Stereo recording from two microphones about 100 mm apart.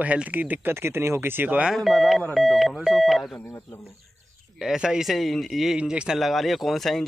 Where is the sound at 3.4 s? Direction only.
25° left (ahead or behind).